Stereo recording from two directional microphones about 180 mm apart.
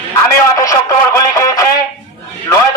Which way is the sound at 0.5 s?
20° left (ahead or behind).